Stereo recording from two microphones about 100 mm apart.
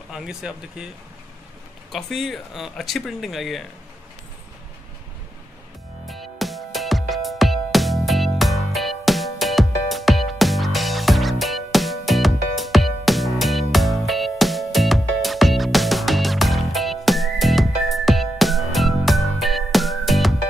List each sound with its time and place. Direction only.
0.1 s speech: 5° right (ahead or behind)
1.9 s speech: 5° left (ahead or behind)
6.0 s music: centre (ahead or behind)